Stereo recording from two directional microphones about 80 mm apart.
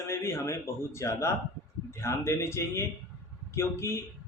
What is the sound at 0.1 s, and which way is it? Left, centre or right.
Speech, left.